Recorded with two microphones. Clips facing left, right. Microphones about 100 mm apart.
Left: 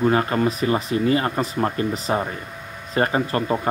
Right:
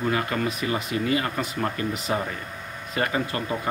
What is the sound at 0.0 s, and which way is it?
Speech, 35° left (ahead or behind).